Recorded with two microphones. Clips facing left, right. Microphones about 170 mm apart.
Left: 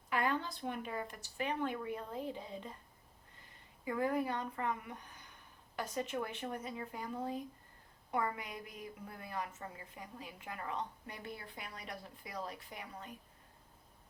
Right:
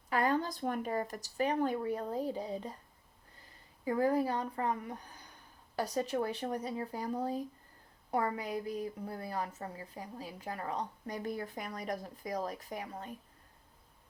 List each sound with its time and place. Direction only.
0.1 s a woman's voice: 40° right (ahead or behind)
3.8 s a woman's voice: 35° right (ahead or behind)